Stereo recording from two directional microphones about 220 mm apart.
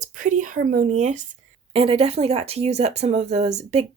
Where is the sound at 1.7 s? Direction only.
25° right (ahead or behind).